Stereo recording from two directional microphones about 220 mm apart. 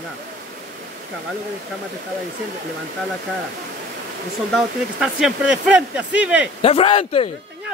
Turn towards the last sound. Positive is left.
turn(degrees=25)  # may be behind; listen again after turning